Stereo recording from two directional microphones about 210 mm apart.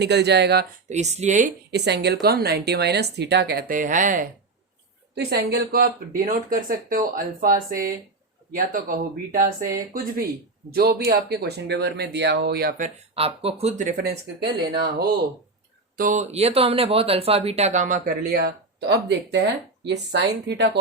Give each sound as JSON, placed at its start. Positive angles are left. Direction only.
{"t": 0.0, "sound": "speech", "side_deg": -55}
{"t": 0.9, "sound": "speech", "side_deg": -35}
{"t": 5.1, "sound": "speech", "side_deg": -50}
{"t": 13.1, "sound": "speech", "side_deg": -25}
{"t": 16.0, "sound": "speech", "side_deg": -40}